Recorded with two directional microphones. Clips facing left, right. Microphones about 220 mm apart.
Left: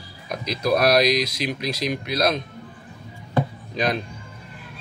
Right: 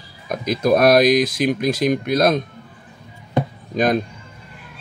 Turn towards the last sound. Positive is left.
turn(degrees=-50)  # may be behind; listen again after turning